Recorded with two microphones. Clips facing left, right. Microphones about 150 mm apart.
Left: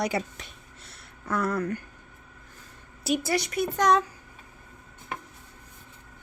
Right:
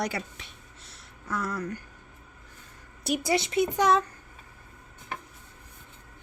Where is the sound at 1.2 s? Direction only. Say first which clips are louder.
Left 5 dB; 60° left (ahead or behind).